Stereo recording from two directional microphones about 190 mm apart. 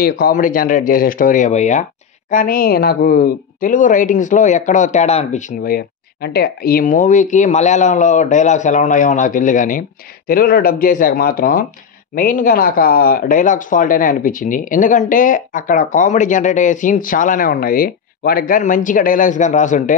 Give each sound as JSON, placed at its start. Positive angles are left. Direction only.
{"t": 0.0, "sound": "a woman's voice", "side_deg": 50}
{"t": 2.3, "sound": "a woman's voice", "side_deg": 50}